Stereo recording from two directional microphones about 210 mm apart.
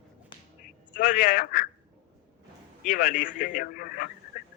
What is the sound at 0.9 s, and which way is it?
Speech, 40° left (ahead or behind).